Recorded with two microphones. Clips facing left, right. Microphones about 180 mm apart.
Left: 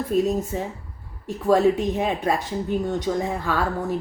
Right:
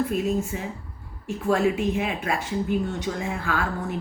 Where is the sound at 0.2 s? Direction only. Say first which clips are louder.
Left 3 dB; 40° left (ahead or behind).